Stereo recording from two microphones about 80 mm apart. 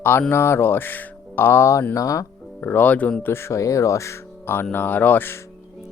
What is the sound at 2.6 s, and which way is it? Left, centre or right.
Speech, left.